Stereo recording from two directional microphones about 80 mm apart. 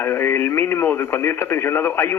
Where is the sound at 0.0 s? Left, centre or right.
Left.